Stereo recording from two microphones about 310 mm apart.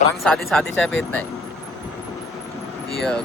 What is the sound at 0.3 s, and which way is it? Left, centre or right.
Speech, centre.